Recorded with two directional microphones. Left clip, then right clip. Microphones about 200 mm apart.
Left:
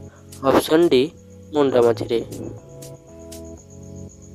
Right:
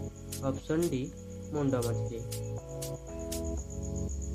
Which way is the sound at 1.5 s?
50° left (ahead or behind).